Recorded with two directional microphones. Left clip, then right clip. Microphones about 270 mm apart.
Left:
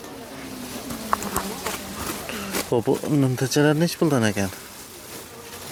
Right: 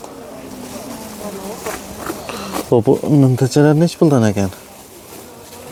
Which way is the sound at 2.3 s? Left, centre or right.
Right.